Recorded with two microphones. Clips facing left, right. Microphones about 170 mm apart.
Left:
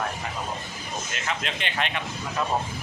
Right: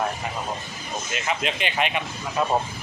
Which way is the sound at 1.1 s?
10° right (ahead or behind).